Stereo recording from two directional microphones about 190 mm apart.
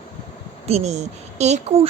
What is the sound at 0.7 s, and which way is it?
A woman's voice, 35° right (ahead or behind).